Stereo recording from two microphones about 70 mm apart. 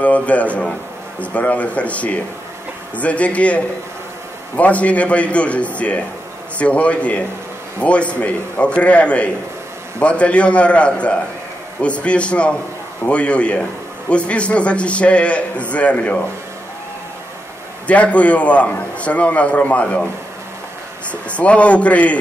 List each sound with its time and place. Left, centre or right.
0.0 s a man's voice: left
17.8 s a man's voice: centre
21.1 s a man's voice: centre